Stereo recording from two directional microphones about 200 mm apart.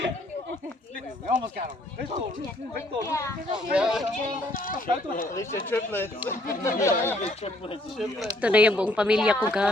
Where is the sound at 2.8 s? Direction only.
15° left (ahead or behind).